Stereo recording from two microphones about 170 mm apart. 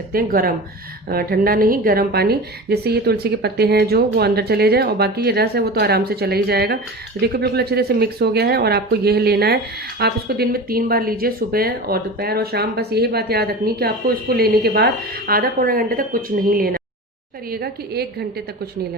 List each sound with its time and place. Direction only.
0.1 s a woman's voice: 60° right (ahead or behind)